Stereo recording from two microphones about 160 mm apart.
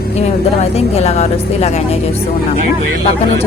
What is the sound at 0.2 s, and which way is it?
Speech, 40° left (ahead or behind).